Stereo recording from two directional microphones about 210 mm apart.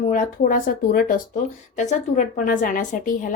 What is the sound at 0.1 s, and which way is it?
A woman's voice, 40° left (ahead or behind).